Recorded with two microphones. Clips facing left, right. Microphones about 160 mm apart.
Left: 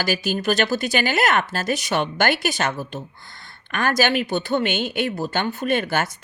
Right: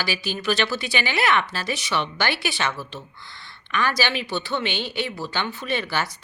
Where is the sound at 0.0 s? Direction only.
45° left (ahead or behind).